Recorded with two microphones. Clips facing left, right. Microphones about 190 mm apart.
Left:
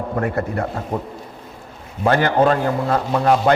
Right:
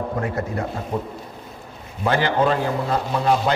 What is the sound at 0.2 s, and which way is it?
Speech, 55° left (ahead or behind).